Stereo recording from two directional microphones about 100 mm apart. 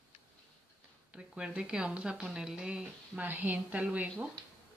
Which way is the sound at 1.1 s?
10° right (ahead or behind).